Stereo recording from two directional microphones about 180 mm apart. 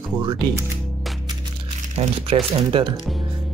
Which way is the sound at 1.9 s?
35° right (ahead or behind).